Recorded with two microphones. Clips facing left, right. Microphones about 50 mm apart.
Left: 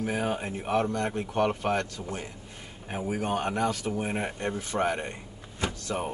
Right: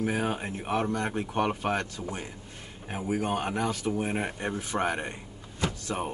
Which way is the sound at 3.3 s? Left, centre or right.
Centre.